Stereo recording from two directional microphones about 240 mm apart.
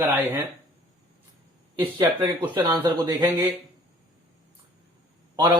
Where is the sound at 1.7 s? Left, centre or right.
Centre.